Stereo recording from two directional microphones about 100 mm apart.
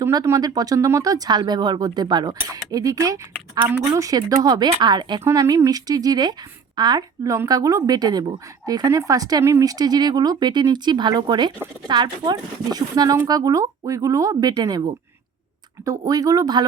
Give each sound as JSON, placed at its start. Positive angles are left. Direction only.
{"t": 0.3, "sound": "speech", "side_deg": -40}
{"t": 5.2, "sound": "a woman's voice", "side_deg": -35}